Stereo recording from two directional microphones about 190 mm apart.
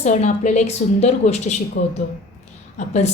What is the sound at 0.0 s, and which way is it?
A woman's voice, 40° left (ahead or behind).